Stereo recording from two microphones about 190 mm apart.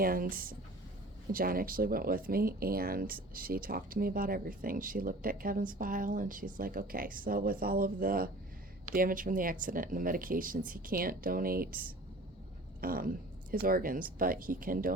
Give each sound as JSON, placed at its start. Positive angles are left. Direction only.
{"t": 0.0, "sound": "speech", "side_deg": -50}